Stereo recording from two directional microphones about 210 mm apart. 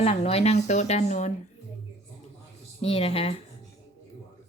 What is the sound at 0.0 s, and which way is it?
A woman's voice, 30° left (ahead or behind).